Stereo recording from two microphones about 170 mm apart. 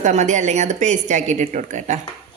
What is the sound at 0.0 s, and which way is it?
A woman's voice, 45° right (ahead or behind).